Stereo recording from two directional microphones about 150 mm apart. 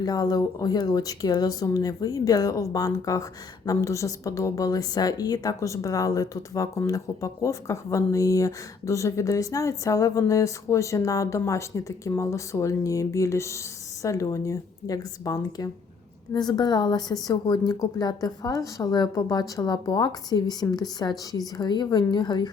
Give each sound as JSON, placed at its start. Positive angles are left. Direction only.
{"t": 0.0, "sound": "a woman's voice", "side_deg": 25}